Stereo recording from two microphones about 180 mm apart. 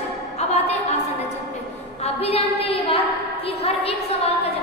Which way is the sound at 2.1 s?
35° left (ahead or behind).